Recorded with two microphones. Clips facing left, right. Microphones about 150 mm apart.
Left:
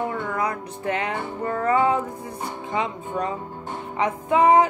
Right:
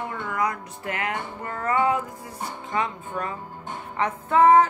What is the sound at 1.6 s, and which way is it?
Music, 20° left (ahead or behind).